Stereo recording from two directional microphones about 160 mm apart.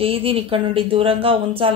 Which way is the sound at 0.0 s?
35° right (ahead or behind).